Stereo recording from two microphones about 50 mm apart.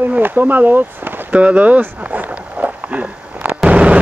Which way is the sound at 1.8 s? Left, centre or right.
Right.